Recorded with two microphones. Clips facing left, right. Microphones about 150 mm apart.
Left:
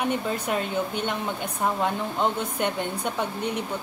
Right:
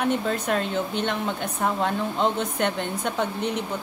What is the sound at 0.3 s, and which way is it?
A woman's voice, 10° left (ahead or behind).